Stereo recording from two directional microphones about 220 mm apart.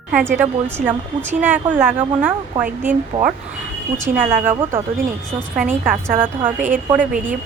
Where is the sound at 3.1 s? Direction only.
30° right (ahead or behind).